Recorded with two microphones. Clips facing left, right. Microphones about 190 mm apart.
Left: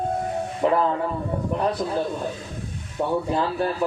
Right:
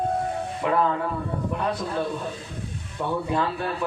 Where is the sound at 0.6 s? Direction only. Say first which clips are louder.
Left 4 dB; 35° left (ahead or behind).